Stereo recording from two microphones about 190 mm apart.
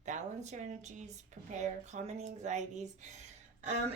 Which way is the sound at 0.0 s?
40° right (ahead or behind).